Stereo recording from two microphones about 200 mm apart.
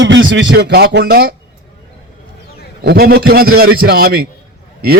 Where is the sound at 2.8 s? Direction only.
50° right (ahead or behind).